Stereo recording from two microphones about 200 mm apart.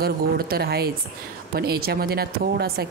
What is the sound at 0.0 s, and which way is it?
Speech, 50° right (ahead or behind).